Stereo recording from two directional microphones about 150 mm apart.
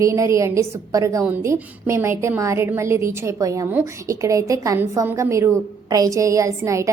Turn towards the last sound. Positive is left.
turn(degrees=-20)  # may be behind; listen again after turning